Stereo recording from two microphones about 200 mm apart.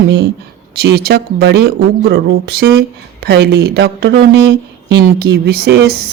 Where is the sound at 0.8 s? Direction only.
55° right (ahead or behind).